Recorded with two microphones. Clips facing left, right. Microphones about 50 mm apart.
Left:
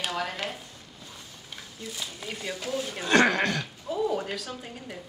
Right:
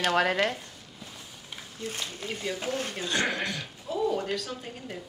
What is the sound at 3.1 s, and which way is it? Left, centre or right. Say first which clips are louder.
Speech: left 8 dB; left.